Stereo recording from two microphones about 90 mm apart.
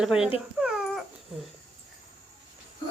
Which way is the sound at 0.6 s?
5° right (ahead or behind).